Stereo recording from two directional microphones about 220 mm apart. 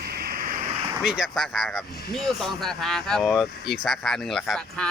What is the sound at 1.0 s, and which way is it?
Speech, centre (ahead or behind).